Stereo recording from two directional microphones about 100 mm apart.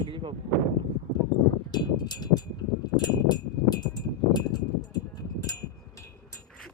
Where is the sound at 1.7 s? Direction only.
45° left (ahead or behind).